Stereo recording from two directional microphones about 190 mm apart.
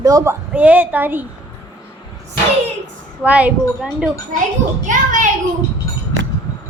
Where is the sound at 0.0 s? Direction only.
20° right (ahead or behind).